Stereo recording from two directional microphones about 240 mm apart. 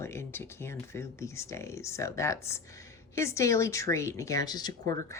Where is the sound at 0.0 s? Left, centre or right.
Centre.